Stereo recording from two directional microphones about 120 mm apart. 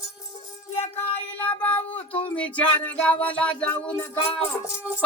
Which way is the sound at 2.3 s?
10° left (ahead or behind).